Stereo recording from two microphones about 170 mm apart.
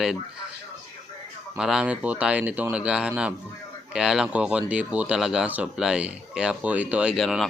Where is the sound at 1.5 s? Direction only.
5° right (ahead or behind).